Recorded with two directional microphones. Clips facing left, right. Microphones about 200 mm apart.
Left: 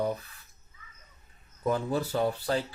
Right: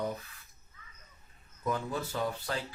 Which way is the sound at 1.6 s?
30° left (ahead or behind).